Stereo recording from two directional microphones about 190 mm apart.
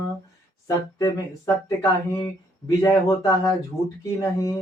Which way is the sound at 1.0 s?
20° left (ahead or behind).